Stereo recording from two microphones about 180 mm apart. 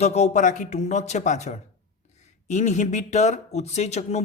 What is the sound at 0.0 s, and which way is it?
Speech, 40° left (ahead or behind).